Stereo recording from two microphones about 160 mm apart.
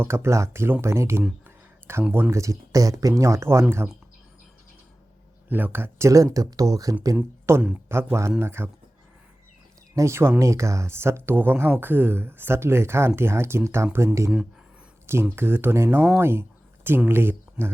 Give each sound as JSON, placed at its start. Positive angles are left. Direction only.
{"t": 0.0, "sound": "speech", "side_deg": -15}
{"t": 5.5, "sound": "speech", "side_deg": -10}
{"t": 9.9, "sound": "speech", "side_deg": -20}